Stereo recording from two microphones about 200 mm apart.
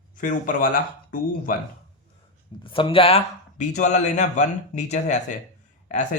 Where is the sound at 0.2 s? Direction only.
40° left (ahead or behind).